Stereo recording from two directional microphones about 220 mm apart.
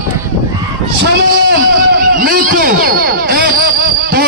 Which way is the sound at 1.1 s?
50° right (ahead or behind).